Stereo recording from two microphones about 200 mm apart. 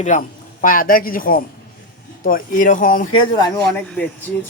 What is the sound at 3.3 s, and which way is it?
Speech, 20° left (ahead or behind).